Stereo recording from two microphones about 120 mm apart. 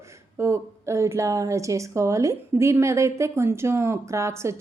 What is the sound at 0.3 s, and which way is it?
A woman's voice, 25° right (ahead or behind).